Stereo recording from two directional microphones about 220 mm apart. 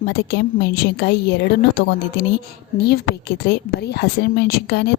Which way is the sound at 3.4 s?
50° left (ahead or behind).